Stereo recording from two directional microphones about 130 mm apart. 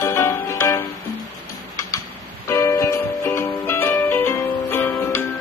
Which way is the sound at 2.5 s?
20° left (ahead or behind).